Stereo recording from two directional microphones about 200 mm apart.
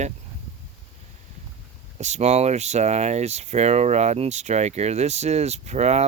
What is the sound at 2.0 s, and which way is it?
Speech, 35° right (ahead or behind).